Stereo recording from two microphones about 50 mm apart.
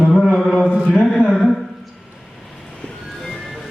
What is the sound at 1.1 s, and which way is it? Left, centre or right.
Mantra, centre.